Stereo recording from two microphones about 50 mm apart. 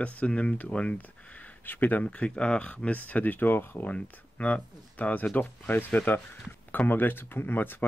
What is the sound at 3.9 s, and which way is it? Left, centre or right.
Speech, left.